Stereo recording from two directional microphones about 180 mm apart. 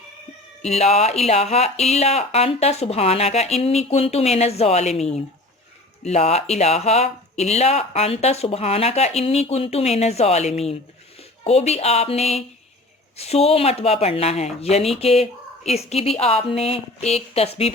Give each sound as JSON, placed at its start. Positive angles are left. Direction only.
{"t": 0.6, "sound": "speech", "side_deg": 35}